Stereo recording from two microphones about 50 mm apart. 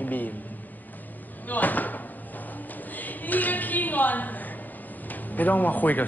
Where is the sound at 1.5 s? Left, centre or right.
Left.